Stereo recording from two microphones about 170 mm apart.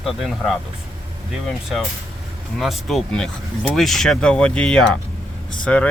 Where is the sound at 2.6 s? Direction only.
Centre (ahead or behind).